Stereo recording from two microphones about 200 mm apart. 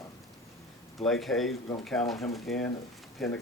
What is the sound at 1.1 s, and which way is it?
Speech, centre (ahead or behind).